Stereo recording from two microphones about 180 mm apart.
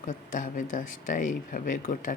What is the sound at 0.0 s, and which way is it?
Speech, 45° left (ahead or behind).